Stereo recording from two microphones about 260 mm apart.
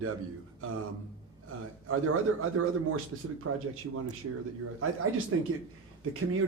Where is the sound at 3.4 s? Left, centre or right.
Right.